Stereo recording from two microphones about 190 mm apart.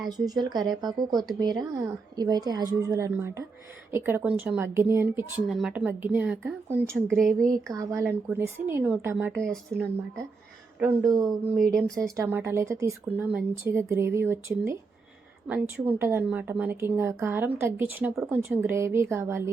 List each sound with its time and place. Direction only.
0.0 s a woman's voice: 20° right (ahead or behind)
5.5 s speech: centre (ahead or behind)
9.3 s speech: 5° left (ahead or behind)
10.8 s speech: 15° right (ahead or behind)